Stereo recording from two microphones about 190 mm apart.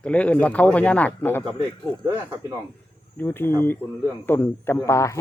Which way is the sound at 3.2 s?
10° left (ahead or behind).